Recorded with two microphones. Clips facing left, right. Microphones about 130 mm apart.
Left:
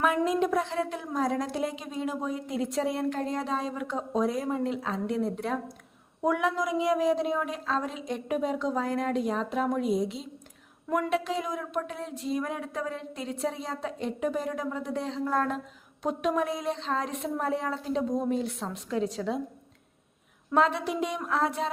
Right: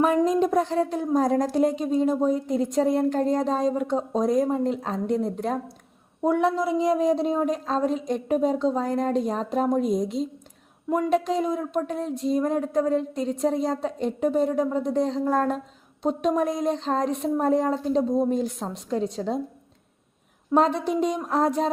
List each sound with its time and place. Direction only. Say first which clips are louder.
0.0 s speech: right 5 dB; 35° right (ahead or behind)
20.6 s speech: right 4 dB; 35° right (ahead or behind)